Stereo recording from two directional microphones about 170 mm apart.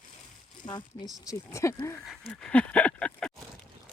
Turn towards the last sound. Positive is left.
turn(degrees=5)  # may be behind; listen again after turning